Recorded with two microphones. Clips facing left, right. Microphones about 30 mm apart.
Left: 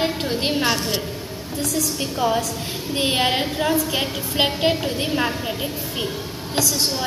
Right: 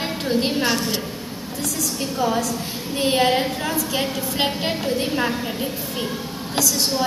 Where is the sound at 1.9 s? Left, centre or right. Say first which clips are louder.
Right 1 dB; left.